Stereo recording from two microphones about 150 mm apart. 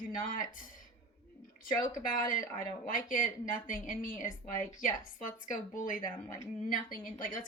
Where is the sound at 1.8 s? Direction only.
60° left (ahead or behind).